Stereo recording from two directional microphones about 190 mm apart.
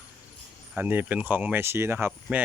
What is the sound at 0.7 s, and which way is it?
Speech, 10° right (ahead or behind).